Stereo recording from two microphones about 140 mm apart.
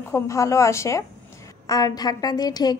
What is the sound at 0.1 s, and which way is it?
A woman's voice, 20° left (ahead or behind).